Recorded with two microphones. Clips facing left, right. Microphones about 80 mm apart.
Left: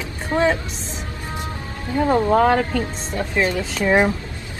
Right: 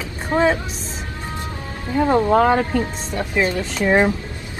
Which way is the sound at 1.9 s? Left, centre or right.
Centre.